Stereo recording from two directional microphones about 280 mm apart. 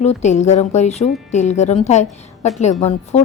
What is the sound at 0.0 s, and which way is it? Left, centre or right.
Speech, left.